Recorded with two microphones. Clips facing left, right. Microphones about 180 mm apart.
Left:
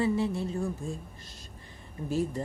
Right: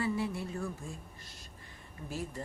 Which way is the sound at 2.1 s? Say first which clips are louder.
Left 10 dB; 25° left (ahead or behind).